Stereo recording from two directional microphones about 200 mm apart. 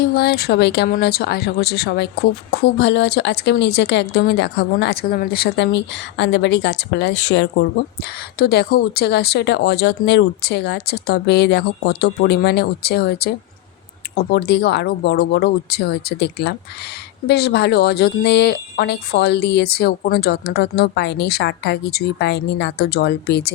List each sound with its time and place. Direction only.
0.0 s speech: 50° left (ahead or behind)
8.4 s speech: 50° left (ahead or behind)